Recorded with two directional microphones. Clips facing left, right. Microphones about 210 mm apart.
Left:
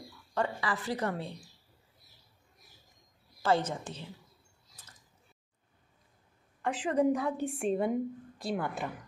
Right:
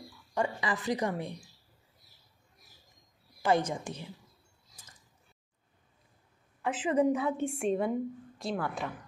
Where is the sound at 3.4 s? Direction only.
15° right (ahead or behind).